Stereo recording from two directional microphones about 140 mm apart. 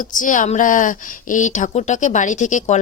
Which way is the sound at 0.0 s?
65° left (ahead or behind).